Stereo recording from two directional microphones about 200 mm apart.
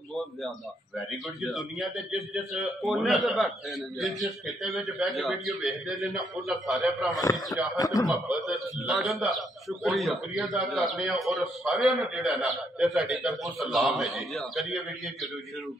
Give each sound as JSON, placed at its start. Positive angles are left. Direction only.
{"t": 0.1, "sound": "a sound", "side_deg": 0}
{"t": 0.9, "sound": "a man's voice", "side_deg": 0}
{"t": 7.2, "sound": "speech", "side_deg": 20}
{"t": 8.5, "sound": "a man's voice", "side_deg": 0}